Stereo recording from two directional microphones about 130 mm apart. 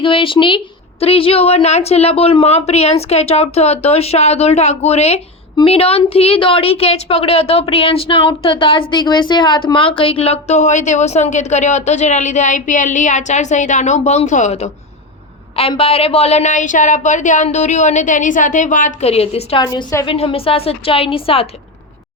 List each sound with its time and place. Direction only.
0.0 s a woman's voice: 45° left (ahead or behind); by 14.7 s 60° left (ahead or behind)
15.8 s a sound: 50° left (ahead or behind); by 18.9 s 85° left
19.0 s a woman's voice: 50° left (ahead or behind)
19.6 s a woman's voice: 25° left (ahead or behind)
20.1 s a woman's voice: 45° left (ahead or behind)